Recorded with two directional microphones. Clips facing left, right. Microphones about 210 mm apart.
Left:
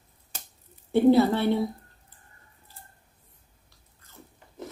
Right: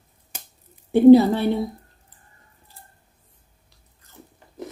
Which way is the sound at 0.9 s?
15° right (ahead or behind).